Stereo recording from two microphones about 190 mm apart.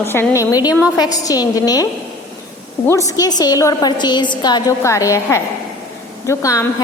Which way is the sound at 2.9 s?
15° left (ahead or behind).